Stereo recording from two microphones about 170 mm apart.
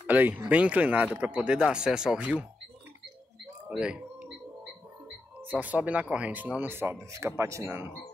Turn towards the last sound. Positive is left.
turn(degrees=-15)  # may be behind; listen again after turning